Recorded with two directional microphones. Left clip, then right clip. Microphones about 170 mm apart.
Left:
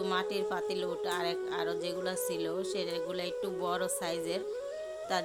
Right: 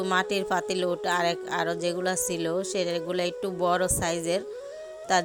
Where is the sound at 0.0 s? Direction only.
35° right (ahead or behind).